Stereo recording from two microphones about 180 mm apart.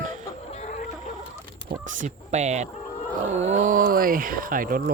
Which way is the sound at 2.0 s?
40° right (ahead or behind).